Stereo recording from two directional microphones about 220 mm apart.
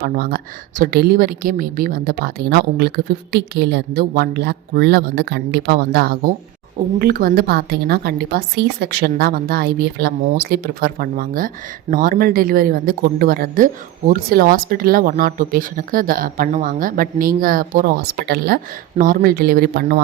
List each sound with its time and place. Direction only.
0.0 s a woman's voice: 45° right (ahead or behind)